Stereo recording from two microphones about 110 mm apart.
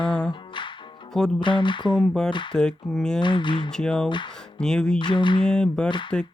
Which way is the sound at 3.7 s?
5° left (ahead or behind).